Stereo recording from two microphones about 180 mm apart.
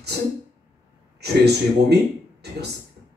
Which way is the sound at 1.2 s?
65° right (ahead or behind).